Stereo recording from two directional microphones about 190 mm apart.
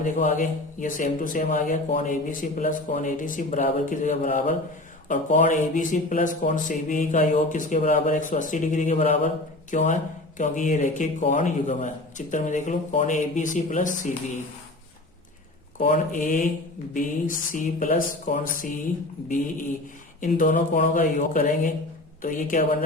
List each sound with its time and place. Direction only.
0.0 s speech: 45° left (ahead or behind)
15.8 s speech: 45° left (ahead or behind)
20.2 s speech: 45° left (ahead or behind)